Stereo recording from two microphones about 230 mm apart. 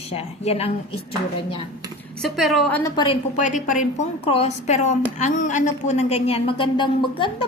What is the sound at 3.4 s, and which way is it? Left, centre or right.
A woman's voice, left.